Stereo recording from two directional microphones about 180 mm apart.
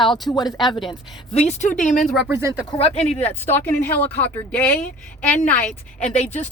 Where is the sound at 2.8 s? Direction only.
35° left (ahead or behind).